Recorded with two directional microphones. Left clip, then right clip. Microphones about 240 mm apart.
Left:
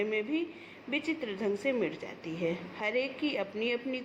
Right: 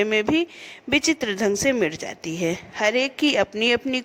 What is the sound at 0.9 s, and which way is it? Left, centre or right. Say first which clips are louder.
Speech: right 12 dB; right.